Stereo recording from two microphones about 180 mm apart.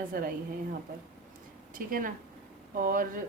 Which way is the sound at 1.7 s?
50° right (ahead or behind).